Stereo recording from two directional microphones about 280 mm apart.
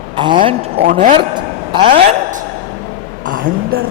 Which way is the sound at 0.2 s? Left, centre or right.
Centre.